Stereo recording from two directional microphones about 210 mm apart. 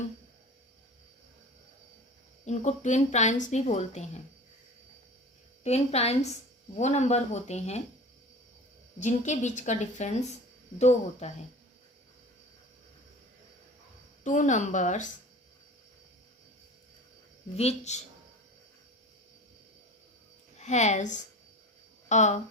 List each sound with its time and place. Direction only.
2.4 s a woman's voice: 35° left (ahead or behind)
5.6 s a woman's voice: 30° left (ahead or behind)
9.0 s a woman's voice: 35° left (ahead or behind)
14.3 s a woman's voice: 35° left (ahead or behind)
17.6 s a woman's voice: 30° left (ahead or behind)
20.6 s a woman's voice: 35° left (ahead or behind)